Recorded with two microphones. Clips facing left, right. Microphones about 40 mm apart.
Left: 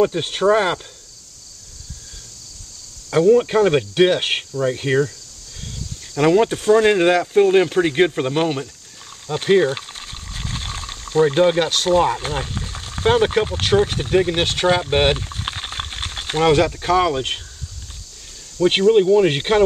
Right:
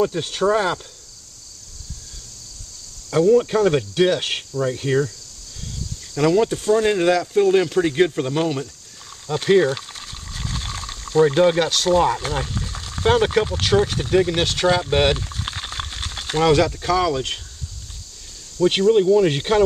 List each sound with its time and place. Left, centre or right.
0.0 s speech: left
3.1 s cricket: left
6.1 s speech: left
9.3 s speech: centre; by 17.4 s left
18.6 s cricket: left